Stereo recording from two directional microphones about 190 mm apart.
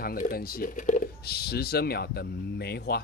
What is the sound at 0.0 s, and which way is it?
A man's voice, 50° left (ahead or behind).